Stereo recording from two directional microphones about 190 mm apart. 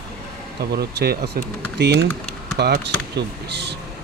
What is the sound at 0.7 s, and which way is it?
Speech, 55° right (ahead or behind).